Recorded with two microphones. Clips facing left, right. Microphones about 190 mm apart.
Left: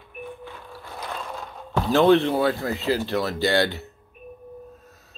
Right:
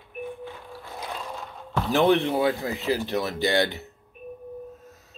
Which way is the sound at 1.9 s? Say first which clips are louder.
Left 3 dB; 15° right (ahead or behind).